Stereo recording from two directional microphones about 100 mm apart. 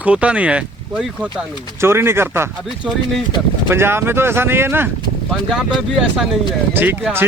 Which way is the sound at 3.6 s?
25° right (ahead or behind).